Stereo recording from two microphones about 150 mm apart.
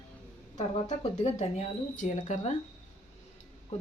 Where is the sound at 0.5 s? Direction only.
45° left (ahead or behind).